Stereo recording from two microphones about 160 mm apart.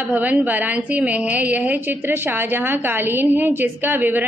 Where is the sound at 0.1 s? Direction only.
10° right (ahead or behind).